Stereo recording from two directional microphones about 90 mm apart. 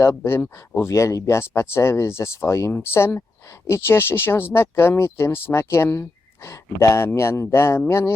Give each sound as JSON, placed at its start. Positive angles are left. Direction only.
{"t": 0.0, "sound": "speech", "side_deg": 30}